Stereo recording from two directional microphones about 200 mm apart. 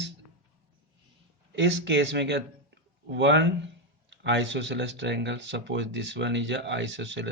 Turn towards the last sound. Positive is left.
turn(degrees=-65)  # may be behind; listen again after turning